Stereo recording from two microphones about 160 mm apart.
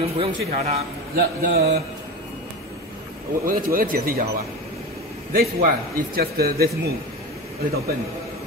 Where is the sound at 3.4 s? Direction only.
60° right (ahead or behind).